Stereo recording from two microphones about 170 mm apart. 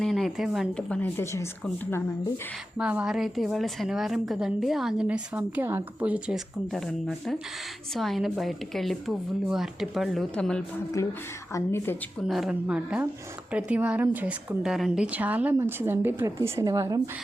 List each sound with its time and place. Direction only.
0.0 s a woman's voice: centre (ahead or behind)
2.7 s a woman's voice: 5° right (ahead or behind)
11.5 s a woman's voice: 15° left (ahead or behind)
12.3 s a woman's voice: 5° right (ahead or behind); by 17.0 s 20° right (ahead or behind)